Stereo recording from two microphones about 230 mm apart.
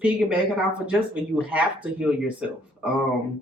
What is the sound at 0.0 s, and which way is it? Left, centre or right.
Speech, centre.